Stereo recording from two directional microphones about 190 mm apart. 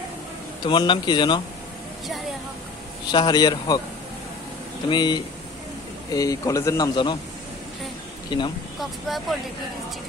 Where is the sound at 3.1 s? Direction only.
20° left (ahead or behind).